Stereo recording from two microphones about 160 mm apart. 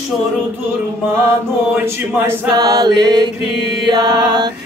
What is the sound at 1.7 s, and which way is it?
Chant, 15° right (ahead or behind).